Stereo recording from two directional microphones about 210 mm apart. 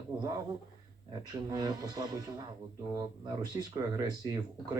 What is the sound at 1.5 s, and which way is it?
Speech, 15° right (ahead or behind).